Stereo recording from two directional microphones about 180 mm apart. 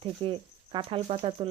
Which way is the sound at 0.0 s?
30° right (ahead or behind).